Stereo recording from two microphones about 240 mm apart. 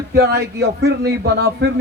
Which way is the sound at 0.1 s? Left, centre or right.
Right.